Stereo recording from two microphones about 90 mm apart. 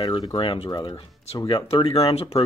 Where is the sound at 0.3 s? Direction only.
75° left (ahead or behind).